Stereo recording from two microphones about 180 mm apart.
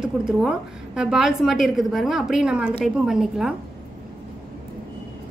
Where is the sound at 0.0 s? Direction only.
5° right (ahead or behind).